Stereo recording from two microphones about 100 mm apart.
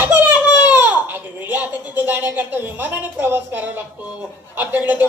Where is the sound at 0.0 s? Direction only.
20° right (ahead or behind).